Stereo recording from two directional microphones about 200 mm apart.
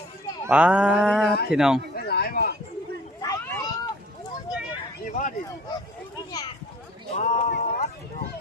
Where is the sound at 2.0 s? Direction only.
50° left (ahead or behind).